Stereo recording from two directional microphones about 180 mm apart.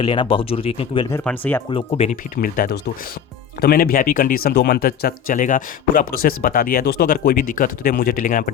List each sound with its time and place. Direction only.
0.0 s speech: 30° left (ahead or behind)
1.1 s speech: 10° left (ahead or behind)
1.7 s speech: 35° left (ahead or behind)
2.3 s speech: 55° left (ahead or behind)